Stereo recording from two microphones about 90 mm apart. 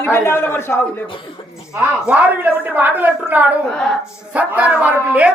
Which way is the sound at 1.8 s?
20° right (ahead or behind).